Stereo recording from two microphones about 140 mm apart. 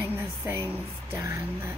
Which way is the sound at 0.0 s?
15° right (ahead or behind).